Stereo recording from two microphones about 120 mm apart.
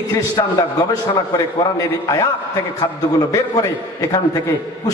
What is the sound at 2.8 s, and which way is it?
A man's voice, 30° left (ahead or behind).